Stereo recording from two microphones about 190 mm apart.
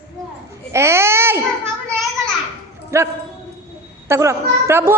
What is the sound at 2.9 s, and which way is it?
Dog, 15° right (ahead or behind).